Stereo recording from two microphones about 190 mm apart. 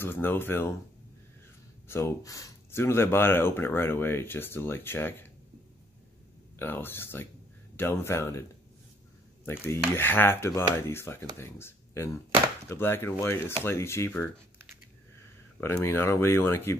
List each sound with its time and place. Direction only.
0.0 s speech: 10° left (ahead or behind)
1.9 s speech: 15° left (ahead or behind)
6.6 s speech: 10° left (ahead or behind)
9.5 s speech: 10° left (ahead or behind)
15.6 s speech: 15° left (ahead or behind)